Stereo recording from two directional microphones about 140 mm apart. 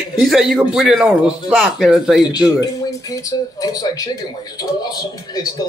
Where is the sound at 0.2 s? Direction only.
Centre (ahead or behind).